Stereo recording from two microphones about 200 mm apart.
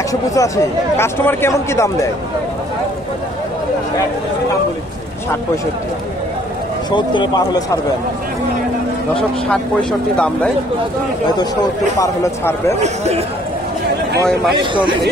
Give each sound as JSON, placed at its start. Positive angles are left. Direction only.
{"t": 0.1, "sound": "speech", "side_deg": 15}
{"t": 6.9, "sound": "a man's voice", "side_deg": 20}
{"t": 9.5, "sound": "speech", "side_deg": 5}
{"t": 12.0, "sound": "speech", "side_deg": 15}
{"t": 12.8, "sound": "a man's voice", "side_deg": -35}
{"t": 14.6, "sound": "speech", "side_deg": -25}